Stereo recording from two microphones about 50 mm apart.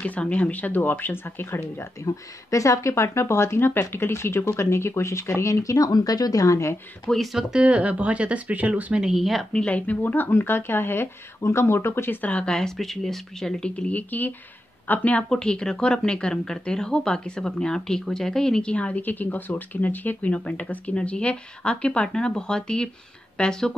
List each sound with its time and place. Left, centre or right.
0.0 s speech: left
2.5 s speech: left
6.5 s speech: left
7.3 s speech: centre
9.0 s speech: centre
9.7 s speech: left
10.0 s speech: left
12.2 s speech: left
12.4 s speech: centre
13.9 s speech: left
15.2 s speech: centre
18.7 s speech: left